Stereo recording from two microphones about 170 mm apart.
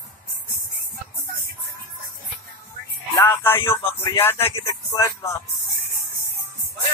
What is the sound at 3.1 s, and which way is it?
Speech, 15° left (ahead or behind).